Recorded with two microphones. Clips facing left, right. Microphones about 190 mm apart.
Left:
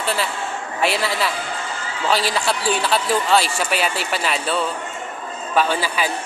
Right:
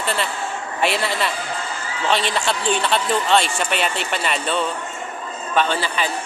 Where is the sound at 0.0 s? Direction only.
Centre (ahead or behind).